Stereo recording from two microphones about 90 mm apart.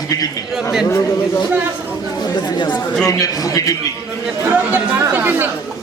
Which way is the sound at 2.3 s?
55° left (ahead or behind).